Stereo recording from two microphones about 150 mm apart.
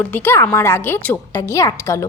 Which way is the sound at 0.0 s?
10° left (ahead or behind).